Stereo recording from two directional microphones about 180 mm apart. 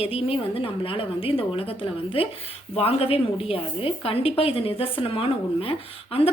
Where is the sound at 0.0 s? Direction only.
30° left (ahead or behind).